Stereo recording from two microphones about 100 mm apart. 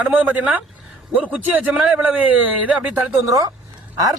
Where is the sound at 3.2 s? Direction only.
35° right (ahead or behind).